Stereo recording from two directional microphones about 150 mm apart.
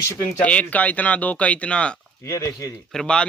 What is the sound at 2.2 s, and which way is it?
Speech, 20° left (ahead or behind).